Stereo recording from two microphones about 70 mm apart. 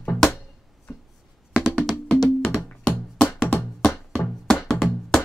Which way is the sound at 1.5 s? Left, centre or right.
Centre.